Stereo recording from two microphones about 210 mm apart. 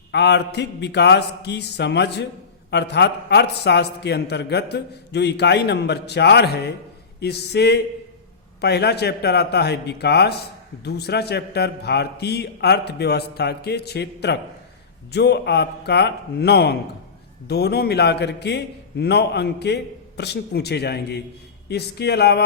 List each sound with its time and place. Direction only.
0.1 s a man's voice: 55° left (ahead or behind)